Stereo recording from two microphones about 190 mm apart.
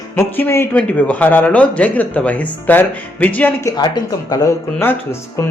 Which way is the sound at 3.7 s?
20° left (ahead or behind).